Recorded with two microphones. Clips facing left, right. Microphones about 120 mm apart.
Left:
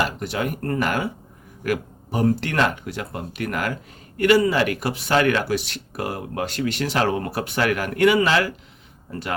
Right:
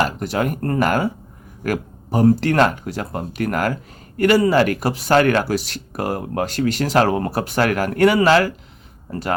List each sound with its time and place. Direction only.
0.0 s speech: 40° right (ahead or behind)